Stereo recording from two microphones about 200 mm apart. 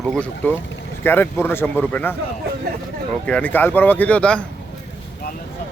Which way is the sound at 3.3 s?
5° left (ahead or behind).